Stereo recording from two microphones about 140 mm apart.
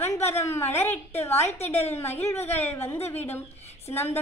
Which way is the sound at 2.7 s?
15° left (ahead or behind).